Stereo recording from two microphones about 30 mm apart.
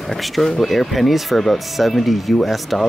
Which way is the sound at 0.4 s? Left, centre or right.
Centre.